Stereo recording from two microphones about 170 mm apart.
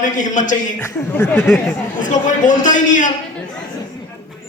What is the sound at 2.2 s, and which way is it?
Speech, 50° left (ahead or behind).